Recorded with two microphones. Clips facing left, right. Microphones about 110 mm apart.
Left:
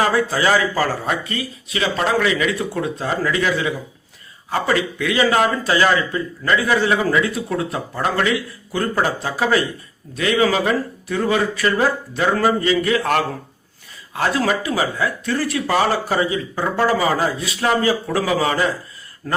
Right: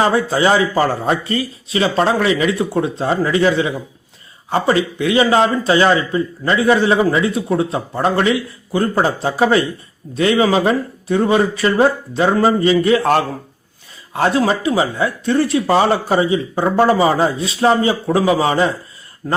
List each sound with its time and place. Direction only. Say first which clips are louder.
0.0 s speech: right 3 dB; 25° right (ahead or behind)